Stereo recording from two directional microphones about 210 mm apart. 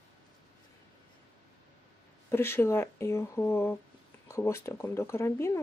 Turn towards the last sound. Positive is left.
turn(degrees=10)  # may be behind; listen again after turning